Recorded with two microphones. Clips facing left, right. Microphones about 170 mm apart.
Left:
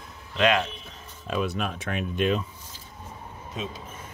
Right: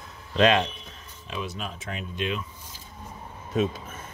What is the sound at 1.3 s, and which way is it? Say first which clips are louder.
Speech: left 6 dB; 55° left (ahead or behind).